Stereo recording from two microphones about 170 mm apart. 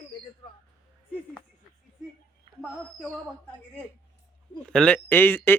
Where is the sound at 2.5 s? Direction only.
30° right (ahead or behind).